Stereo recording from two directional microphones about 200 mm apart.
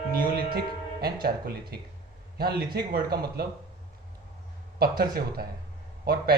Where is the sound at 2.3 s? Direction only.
50° right (ahead or behind).